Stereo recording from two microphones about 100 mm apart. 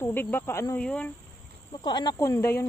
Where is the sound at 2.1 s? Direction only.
25° left (ahead or behind).